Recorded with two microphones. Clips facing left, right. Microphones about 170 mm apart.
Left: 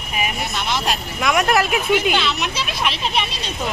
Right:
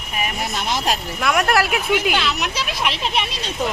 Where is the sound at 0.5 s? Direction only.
40° right (ahead or behind).